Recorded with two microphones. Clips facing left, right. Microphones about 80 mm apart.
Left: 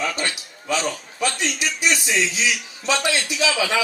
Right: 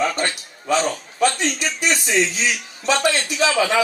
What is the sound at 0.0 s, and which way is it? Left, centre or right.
Speech, right.